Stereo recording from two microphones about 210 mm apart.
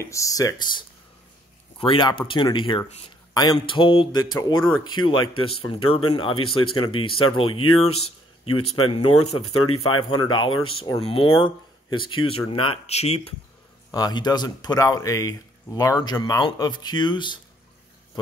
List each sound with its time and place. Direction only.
0.0 s speech: 15° left (ahead or behind)
8.5 s speech: 90° left
8.7 s speech: 25° left (ahead or behind)
13.9 s speech: 20° left (ahead or behind)